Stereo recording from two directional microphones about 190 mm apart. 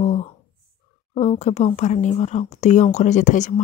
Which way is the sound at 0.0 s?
35° left (ahead or behind).